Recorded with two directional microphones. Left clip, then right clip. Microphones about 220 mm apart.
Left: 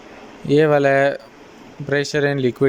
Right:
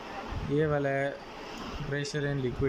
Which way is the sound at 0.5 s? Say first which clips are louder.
Left 14 dB; 45° left (ahead or behind).